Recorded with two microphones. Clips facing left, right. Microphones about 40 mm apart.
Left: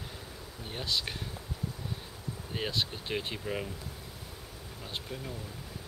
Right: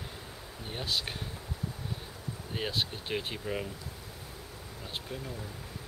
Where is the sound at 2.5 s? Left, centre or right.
Centre.